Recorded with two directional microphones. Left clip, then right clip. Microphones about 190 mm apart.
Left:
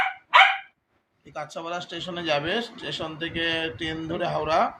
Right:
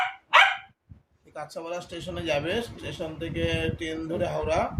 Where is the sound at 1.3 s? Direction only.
10° right (ahead or behind).